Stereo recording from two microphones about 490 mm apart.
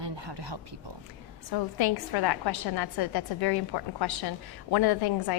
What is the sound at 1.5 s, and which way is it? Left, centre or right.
A woman's voice, left.